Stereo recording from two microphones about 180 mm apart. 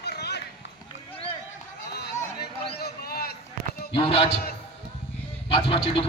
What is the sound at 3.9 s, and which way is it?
Speech, 35° left (ahead or behind).